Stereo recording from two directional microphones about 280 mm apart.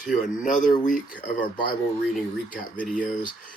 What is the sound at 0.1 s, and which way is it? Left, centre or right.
Speech, left.